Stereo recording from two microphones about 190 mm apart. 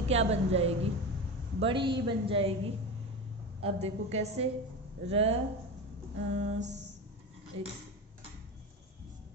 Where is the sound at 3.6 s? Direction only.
35° right (ahead or behind).